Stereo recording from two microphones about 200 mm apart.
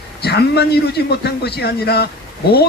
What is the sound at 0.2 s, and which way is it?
A man's voice, 55° left (ahead or behind).